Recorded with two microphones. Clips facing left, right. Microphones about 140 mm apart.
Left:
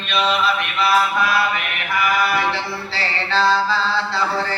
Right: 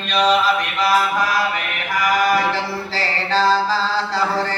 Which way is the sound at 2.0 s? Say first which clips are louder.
Right 2 dB; 40° right (ahead or behind).